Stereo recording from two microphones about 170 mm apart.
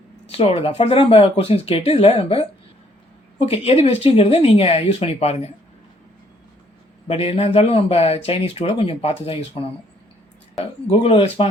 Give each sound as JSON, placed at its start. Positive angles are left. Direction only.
{"t": 0.3, "sound": "speech", "side_deg": 35}
{"t": 7.1, "sound": "speech", "side_deg": 35}